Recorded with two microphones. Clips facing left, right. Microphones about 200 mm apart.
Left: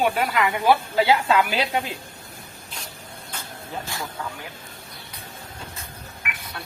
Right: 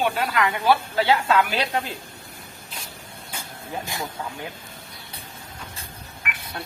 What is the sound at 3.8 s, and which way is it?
Speech, 20° right (ahead or behind).